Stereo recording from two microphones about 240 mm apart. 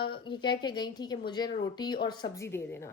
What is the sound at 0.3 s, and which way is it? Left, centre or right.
A woman's voice, centre.